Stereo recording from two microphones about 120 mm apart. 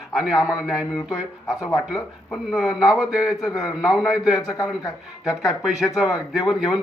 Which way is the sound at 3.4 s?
30° left (ahead or behind).